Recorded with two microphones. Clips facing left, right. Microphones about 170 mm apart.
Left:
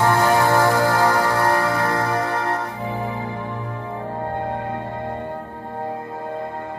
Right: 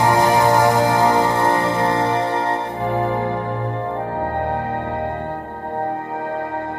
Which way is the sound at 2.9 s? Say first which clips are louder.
Right 10 dB; 65° right (ahead or behind).